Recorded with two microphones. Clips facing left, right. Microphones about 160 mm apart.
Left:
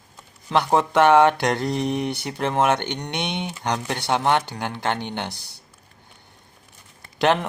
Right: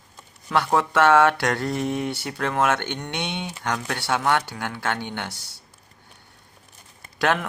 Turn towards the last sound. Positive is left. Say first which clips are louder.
# left 3 dB
turn(degrees=20)  # may be behind; listen again after turning